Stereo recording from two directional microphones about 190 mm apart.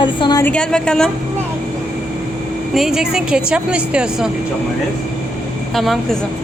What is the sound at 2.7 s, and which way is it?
A woman's voice, centre (ahead or behind).